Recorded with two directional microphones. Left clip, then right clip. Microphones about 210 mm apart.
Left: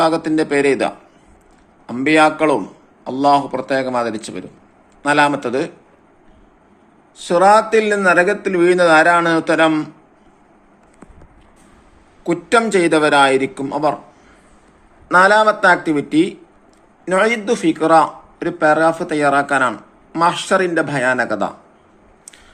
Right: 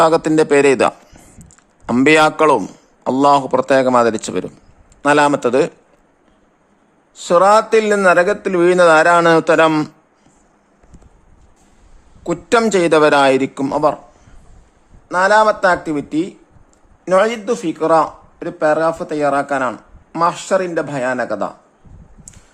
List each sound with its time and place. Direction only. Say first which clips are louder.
0.0 s a man's voice: right 4 dB; 50° right (ahead or behind)
7.2 s a man's voice: right 1 dB; 45° right (ahead or behind)
12.2 s a man's voice: even; 35° right (ahead or behind)
15.0 s a man's voice: left 1 dB; 20° right (ahead or behind)